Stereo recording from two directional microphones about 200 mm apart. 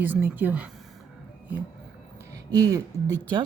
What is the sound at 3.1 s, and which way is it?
Speech, 10° left (ahead or behind).